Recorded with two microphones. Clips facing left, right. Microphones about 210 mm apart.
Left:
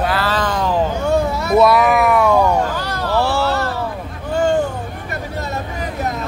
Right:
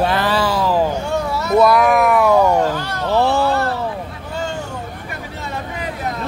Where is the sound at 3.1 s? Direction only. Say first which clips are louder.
Right 2 dB; 20° right (ahead or behind).